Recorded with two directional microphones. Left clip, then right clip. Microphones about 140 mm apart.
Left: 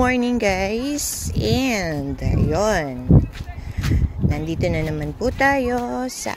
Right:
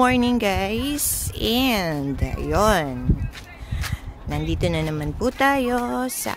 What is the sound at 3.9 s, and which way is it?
Speech, 10° right (ahead or behind).